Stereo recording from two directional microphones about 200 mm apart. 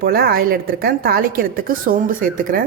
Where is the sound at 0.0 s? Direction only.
50° right (ahead or behind).